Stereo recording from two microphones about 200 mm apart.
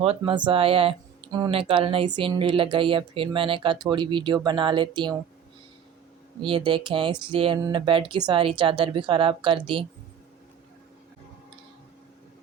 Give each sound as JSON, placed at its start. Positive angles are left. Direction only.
{"t": 0.0, "sound": "speech", "side_deg": -30}
{"t": 6.4, "sound": "speech", "side_deg": -25}